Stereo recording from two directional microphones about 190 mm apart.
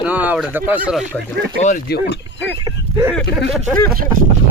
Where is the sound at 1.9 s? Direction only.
65° left (ahead or behind).